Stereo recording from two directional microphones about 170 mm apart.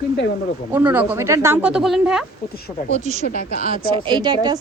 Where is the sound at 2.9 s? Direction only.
45° right (ahead or behind).